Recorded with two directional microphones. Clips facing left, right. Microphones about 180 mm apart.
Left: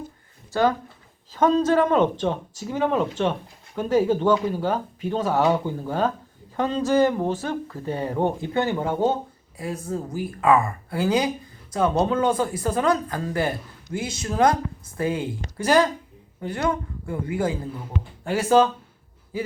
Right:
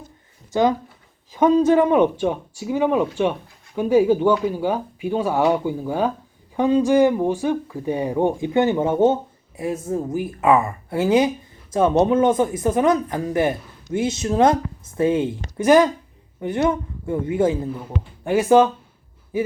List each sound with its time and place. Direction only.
0.5 s speech: 15° right (ahead or behind)